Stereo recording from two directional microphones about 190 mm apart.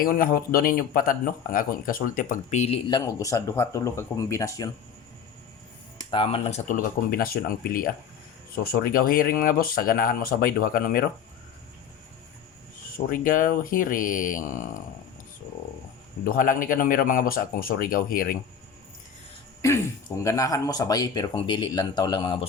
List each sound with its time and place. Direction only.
0.0 s speech: 50° left (ahead or behind); by 4.7 s 15° left (ahead or behind)
6.1 s speech: 30° left (ahead or behind); by 11.0 s 50° left (ahead or behind)
13.1 s speech: 45° left (ahead or behind)
16.2 s speech: 45° left (ahead or behind)
20.2 s speech: 15° left (ahead or behind)